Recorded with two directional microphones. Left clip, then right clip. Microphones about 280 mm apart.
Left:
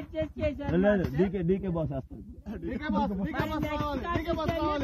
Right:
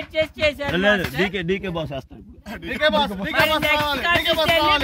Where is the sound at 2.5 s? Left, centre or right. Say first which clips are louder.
Right 15 dB; right.